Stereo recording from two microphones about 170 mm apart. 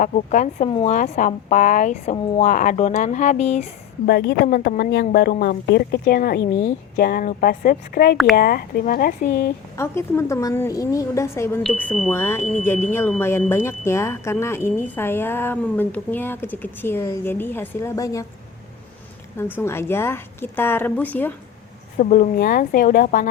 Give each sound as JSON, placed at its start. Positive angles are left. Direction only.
{"t": 0.0, "sound": "speech", "side_deg": 45}
{"t": 4.0, "sound": "a woman's voice", "side_deg": 75}
{"t": 4.4, "sound": "a woman's voice", "side_deg": 65}
{"t": 4.8, "sound": "a woman's voice", "side_deg": 80}
{"t": 9.7, "sound": "speech", "side_deg": 15}
{"t": 19.4, "sound": "speech", "side_deg": 15}
{"t": 21.9, "sound": "a woman's voice", "side_deg": 50}